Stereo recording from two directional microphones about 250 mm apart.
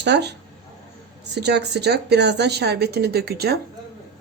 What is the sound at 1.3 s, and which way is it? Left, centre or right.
Speech, right.